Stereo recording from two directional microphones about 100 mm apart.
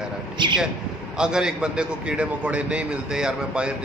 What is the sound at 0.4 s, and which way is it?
Speech, 50° right (ahead or behind).